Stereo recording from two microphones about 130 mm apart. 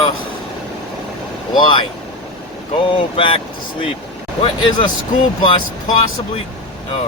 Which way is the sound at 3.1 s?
40° left (ahead or behind).